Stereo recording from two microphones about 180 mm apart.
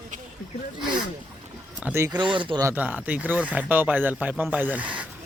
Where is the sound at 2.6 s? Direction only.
10° right (ahead or behind).